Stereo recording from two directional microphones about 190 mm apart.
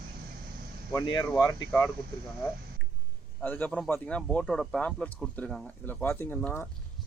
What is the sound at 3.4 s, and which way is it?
Speech, 10° left (ahead or behind).